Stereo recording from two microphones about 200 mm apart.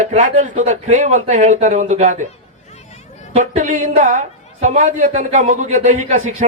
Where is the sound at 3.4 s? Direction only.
40° right (ahead or behind).